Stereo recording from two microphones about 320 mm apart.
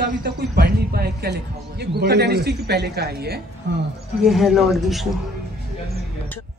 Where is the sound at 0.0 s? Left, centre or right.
Right.